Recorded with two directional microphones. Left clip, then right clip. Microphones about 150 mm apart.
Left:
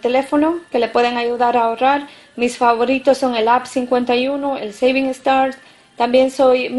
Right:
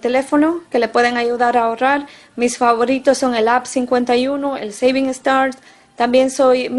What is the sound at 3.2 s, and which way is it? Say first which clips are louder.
A woman's voice: even; 40° right (ahead or behind).